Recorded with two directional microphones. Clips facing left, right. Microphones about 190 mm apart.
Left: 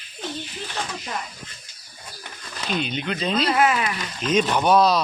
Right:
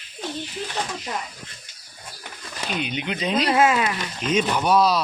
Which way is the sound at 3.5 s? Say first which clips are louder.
Right 4 dB; 25° right (ahead or behind).